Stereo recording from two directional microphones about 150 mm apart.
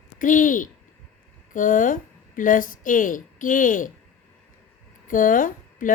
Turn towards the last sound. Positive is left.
turn(degrees=65)  # may be behind; listen again after turning